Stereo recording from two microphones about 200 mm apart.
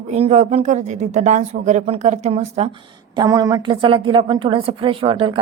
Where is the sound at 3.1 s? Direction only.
20° right (ahead or behind).